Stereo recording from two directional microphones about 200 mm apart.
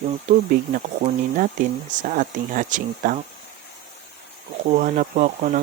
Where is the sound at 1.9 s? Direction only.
40° right (ahead or behind).